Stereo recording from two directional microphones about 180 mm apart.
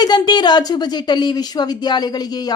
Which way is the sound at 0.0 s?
25° left (ahead or behind).